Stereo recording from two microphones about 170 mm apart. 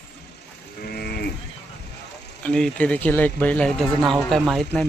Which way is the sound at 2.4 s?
5° left (ahead or behind).